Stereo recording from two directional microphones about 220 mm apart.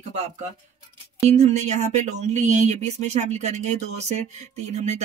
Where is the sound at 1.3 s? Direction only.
30° right (ahead or behind).